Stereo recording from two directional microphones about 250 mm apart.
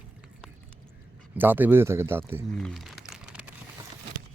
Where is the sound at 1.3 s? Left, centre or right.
Centre.